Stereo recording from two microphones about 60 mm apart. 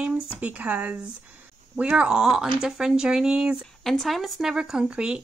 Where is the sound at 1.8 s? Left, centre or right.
Centre.